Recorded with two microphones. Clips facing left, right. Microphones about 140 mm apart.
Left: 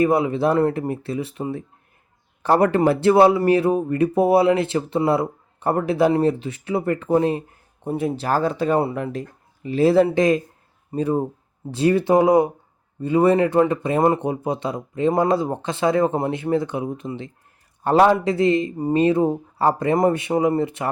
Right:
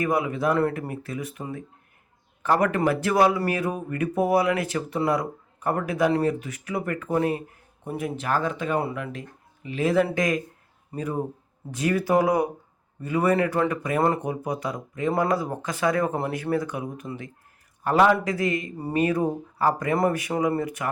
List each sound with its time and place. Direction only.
0.0 s speech: 30° left (ahead or behind)